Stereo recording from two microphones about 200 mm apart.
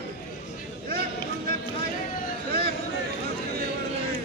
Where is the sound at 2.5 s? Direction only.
50° right (ahead or behind).